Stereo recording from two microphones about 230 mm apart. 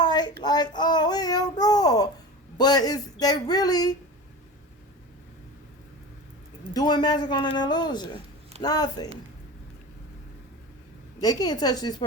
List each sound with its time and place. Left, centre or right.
0.0 s a sound: centre
0.4 s a child's voice: centre
6.7 s a child's voice: centre
11.2 s a child's voice: centre